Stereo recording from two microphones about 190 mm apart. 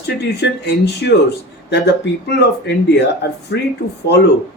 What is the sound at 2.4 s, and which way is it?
Speech, 65° left (ahead or behind).